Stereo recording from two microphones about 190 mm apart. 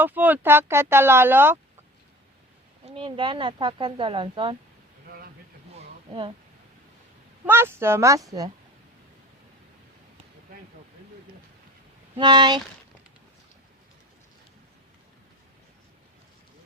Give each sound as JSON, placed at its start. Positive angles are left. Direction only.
{"t": 0.0, "sound": "speech", "side_deg": -10}
{"t": 2.8, "sound": "speech", "side_deg": -25}
{"t": 7.4, "sound": "speech", "side_deg": -10}
{"t": 12.1, "sound": "speech", "side_deg": -25}